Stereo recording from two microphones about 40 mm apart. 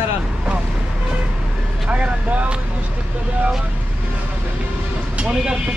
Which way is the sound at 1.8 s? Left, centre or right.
Right.